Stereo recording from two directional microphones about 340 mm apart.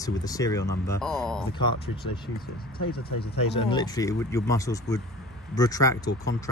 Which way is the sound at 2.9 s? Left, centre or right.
Left.